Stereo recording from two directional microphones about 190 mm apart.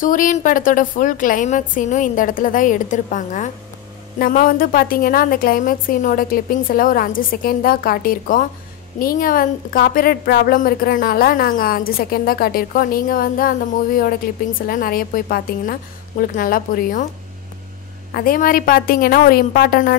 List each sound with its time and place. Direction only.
0.0 s a woman's voice: 45° left (ahead or behind)
18.1 s a woman's voice: 50° left (ahead or behind)